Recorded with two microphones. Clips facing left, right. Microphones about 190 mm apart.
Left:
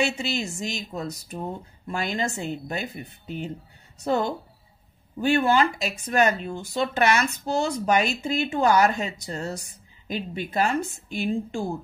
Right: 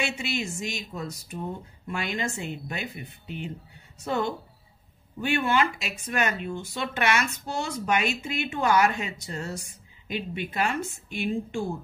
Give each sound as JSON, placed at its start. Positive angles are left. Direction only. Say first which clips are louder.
{"t": 0.0, "sound": "speech", "louder": "left 4 dB", "side_deg": 40}